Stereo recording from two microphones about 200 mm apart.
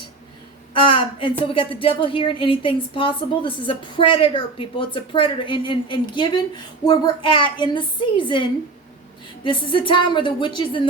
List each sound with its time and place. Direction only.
0.7 s a woman's voice: 25° left (ahead or behind)